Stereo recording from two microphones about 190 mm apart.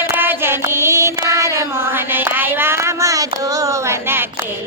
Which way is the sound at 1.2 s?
15° right (ahead or behind).